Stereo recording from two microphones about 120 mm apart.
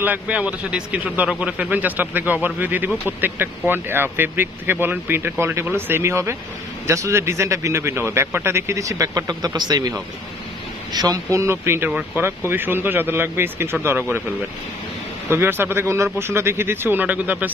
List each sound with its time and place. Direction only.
0.0 s a man's voice: 15° right (ahead or behind)
15.2 s speech: 20° right (ahead or behind)